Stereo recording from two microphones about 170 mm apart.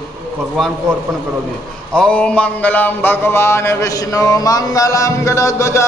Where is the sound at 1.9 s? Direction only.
5° left (ahead or behind).